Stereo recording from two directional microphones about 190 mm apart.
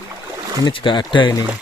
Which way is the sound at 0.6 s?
25° left (ahead or behind).